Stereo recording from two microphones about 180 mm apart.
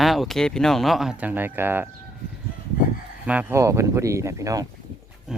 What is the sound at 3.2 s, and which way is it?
Speech, 10° right (ahead or behind).